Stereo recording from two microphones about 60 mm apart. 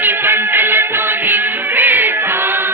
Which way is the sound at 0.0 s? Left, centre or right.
Right.